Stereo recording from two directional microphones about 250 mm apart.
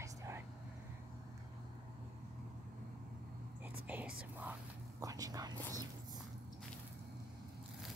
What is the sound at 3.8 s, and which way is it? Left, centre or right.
Whispering, centre.